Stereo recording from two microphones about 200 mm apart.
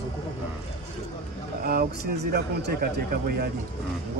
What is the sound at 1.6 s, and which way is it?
Speech, 50° right (ahead or behind).